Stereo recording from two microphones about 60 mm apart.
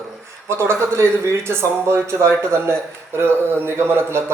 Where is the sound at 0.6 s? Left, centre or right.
Right.